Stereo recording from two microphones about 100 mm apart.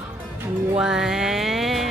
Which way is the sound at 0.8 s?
5° right (ahead or behind).